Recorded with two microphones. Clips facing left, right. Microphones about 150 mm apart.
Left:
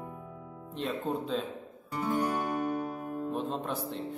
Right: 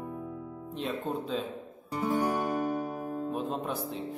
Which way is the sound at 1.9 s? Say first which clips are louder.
Right 2 dB; 20° right (ahead or behind).